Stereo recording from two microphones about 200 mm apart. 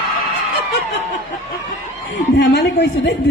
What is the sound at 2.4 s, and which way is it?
Speech, 60° left (ahead or behind).